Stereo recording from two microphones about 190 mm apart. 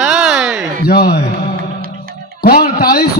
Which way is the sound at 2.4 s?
55° left (ahead or behind).